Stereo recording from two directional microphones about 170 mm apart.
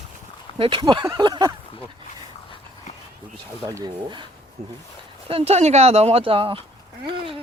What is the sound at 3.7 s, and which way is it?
Speech, 25° right (ahead or behind).